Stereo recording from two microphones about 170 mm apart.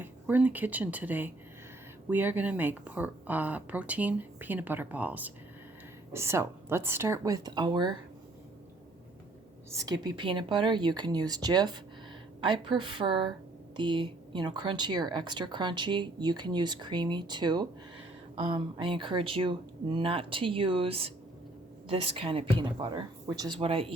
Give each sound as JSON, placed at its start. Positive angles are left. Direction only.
{"t": 0.0, "sound": "speech", "side_deg": -10}
{"t": 9.7, "sound": "speech", "side_deg": -25}